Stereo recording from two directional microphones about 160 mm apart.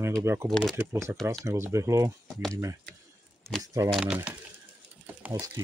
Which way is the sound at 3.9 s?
10° right (ahead or behind).